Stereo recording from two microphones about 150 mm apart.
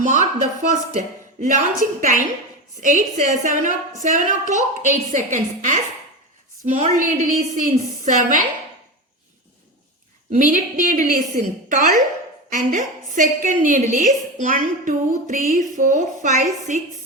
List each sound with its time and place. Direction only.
0.0 s a woman's voice: 55° right (ahead or behind)
10.3 s a woman's voice: 60° right (ahead or behind)